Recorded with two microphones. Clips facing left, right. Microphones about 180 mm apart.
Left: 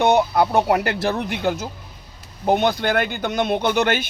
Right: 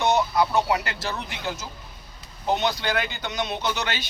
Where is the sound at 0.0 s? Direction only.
60° left (ahead or behind).